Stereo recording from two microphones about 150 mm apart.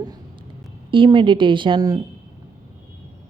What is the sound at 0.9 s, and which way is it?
A woman's voice, 35° right (ahead or behind).